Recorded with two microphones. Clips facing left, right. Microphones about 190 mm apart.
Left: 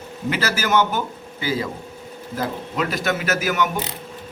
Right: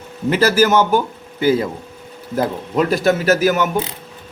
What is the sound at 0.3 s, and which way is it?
Speech, 30° right (ahead or behind).